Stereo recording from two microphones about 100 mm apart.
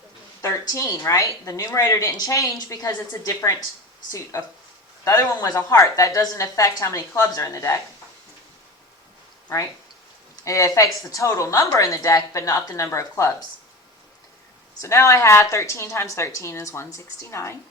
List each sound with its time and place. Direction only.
0.4 s a woman's voice: 30° left (ahead or behind)
10.4 s a woman's voice: 30° left (ahead or behind)
14.8 s a woman's voice: 30° left (ahead or behind)